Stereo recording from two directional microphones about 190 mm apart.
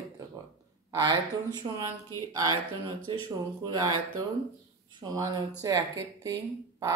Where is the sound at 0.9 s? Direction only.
20° right (ahead or behind).